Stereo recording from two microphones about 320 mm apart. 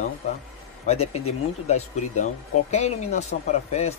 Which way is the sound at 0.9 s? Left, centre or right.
Centre.